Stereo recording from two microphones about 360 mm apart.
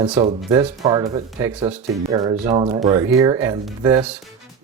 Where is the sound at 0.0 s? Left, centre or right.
Centre.